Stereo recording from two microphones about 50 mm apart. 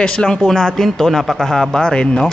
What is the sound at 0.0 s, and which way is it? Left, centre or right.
Speech, centre.